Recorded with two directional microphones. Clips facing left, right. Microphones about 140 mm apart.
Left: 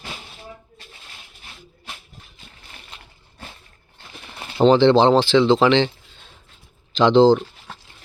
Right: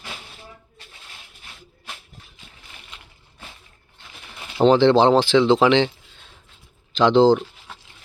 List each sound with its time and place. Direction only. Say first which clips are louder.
2.4 s a sound: left 1 dB; 35° left (ahead or behind)
4.5 s speech: left 1 dB; 10° right (ahead or behind)
6.9 s speech: left 1 dB; 5° right (ahead or behind)